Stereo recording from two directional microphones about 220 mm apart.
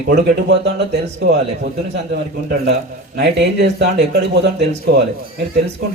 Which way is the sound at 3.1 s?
50° right (ahead or behind).